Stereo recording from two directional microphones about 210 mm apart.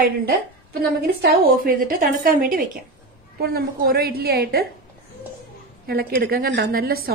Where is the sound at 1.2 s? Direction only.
45° right (ahead or behind).